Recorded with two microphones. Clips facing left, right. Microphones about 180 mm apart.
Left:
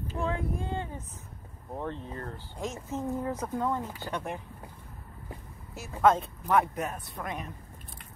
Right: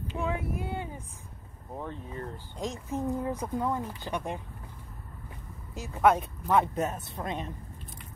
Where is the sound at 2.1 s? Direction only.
15° right (ahead or behind).